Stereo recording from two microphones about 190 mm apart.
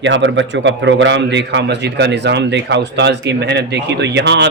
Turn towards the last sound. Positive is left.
turn(degrees=-65)  # may be behind; listen again after turning